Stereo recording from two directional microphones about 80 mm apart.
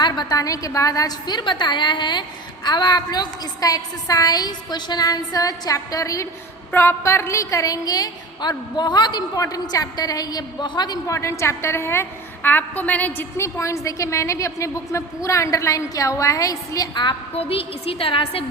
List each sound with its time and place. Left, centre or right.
0.0 s a woman's voice: left
11.0 s a woman's voice: left
13.3 s a woman's voice: left
16.9 s a woman's voice: left